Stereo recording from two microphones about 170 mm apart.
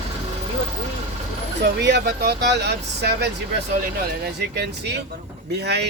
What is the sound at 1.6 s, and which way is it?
Speech, 80° right.